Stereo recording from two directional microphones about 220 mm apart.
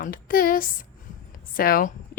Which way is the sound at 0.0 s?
40° left (ahead or behind).